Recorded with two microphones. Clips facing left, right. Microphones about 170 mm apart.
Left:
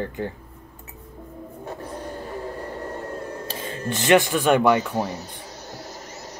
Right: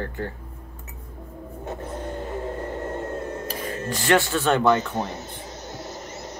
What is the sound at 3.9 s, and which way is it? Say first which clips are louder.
Speech: left 3 dB; 20° left (ahead or behind).